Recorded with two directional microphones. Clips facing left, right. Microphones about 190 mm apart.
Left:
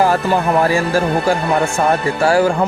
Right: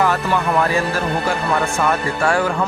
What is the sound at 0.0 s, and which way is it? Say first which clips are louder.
Speech: left 3 dB; 35° left (ahead or behind).